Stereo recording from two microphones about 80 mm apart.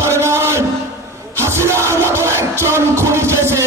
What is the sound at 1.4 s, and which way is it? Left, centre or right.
Music, right.